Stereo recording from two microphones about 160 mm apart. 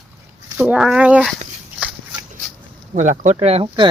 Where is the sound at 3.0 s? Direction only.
50° right (ahead or behind).